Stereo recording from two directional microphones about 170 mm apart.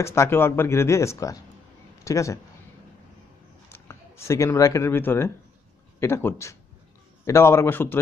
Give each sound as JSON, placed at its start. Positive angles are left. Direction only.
{"t": 0.0, "sound": "speech", "side_deg": 15}
{"t": 3.6, "sound": "speech", "side_deg": 15}